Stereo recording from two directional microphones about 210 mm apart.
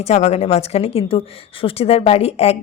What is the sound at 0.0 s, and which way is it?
A woman's voice, 30° left (ahead or behind).